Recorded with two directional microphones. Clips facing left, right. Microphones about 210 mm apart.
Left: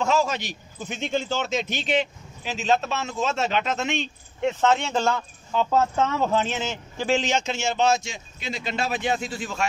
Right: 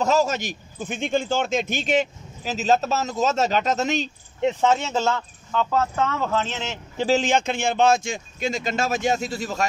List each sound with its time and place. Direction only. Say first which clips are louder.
0.0 s a man's voice: right 2 dB; 40° right (ahead or behind)
4.6 s speech: left 2 dB; 10° right (ahead or behind)
5.5 s speech: left 1 dB; 15° left (ahead or behind)
7.1 s speech: right 3 dB; 50° right (ahead or behind)